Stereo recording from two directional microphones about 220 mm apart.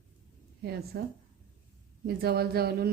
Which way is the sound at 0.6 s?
45° right (ahead or behind).